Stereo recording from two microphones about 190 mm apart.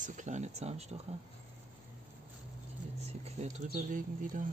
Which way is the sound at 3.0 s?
35° right (ahead or behind).